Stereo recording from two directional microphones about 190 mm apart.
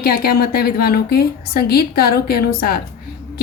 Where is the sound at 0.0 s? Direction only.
55° left (ahead or behind).